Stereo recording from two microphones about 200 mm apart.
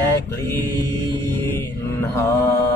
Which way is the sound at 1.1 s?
10° left (ahead or behind).